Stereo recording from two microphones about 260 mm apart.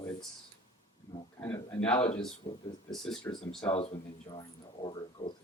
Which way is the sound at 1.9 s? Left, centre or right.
Left.